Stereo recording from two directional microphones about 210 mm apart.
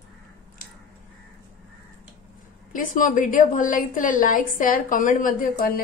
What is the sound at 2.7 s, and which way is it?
A woman's voice, 40° left (ahead or behind).